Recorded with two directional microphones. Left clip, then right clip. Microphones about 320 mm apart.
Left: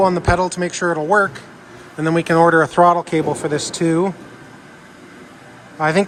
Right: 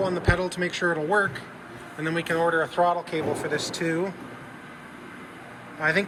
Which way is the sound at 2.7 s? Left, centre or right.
Left.